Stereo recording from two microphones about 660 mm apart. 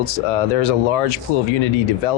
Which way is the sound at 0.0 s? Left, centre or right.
Left.